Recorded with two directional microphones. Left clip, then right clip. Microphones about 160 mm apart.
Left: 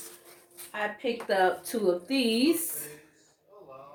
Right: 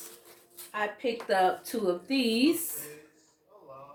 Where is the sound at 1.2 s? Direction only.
20° right (ahead or behind).